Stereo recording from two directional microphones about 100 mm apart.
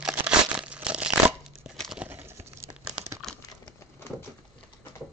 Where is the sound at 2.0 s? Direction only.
20° right (ahead or behind).